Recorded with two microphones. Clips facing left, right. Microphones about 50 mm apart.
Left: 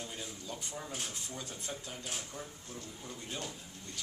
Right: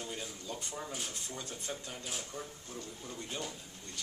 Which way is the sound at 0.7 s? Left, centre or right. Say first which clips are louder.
Right 1 dB; centre.